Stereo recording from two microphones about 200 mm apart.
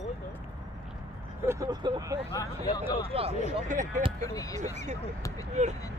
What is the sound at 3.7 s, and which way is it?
Speech, 40° right (ahead or behind).